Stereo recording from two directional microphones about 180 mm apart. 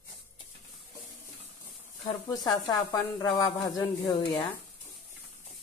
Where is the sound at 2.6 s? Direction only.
20° left (ahead or behind).